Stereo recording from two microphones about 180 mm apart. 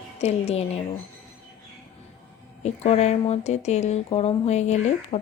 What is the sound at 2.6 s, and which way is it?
Speech, 35° left (ahead or behind).